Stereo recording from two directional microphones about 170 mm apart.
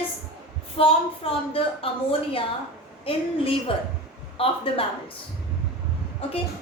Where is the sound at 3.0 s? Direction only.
35° left (ahead or behind).